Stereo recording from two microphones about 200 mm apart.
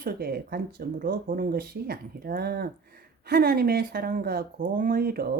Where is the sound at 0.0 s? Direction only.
45° right (ahead or behind).